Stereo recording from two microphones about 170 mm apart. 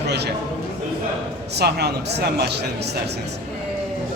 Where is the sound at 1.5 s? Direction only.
75° right (ahead or behind).